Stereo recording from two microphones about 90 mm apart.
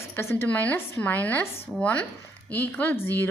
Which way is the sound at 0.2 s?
25° left (ahead or behind).